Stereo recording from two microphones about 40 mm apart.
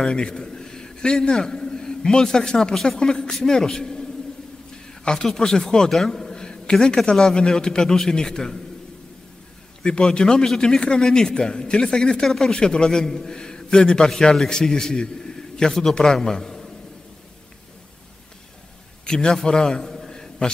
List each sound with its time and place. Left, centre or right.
0.0 s a man's voice: left
2.7 s a man's voice: centre
3.0 s a man's voice: centre
5.0 s a man's voice: centre
5.9 s a sound: centre
7.2 s speech: centre
9.8 s a man's voice: left
19.0 s a man's voice: centre